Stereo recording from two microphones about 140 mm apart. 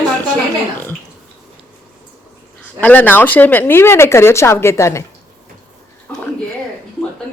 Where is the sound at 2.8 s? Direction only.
10° left (ahead or behind).